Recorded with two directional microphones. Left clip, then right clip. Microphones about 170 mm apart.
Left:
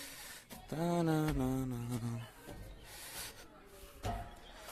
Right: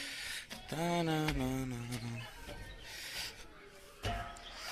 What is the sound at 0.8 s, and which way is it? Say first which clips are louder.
Mantra: even; 30° left (ahead or behind).